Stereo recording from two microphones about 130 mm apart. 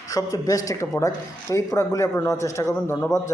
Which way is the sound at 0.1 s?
25° left (ahead or behind).